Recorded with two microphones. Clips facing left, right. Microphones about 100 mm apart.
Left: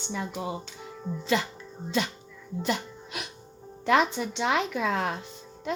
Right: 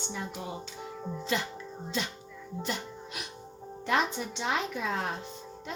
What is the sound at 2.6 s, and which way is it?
Music, 70° left (ahead or behind).